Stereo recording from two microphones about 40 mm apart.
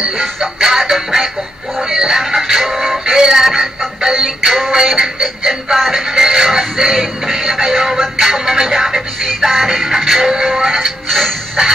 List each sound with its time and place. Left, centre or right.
0.0 s music: centre
6.6 s music: centre
11.1 s music: centre
11.6 s music: centre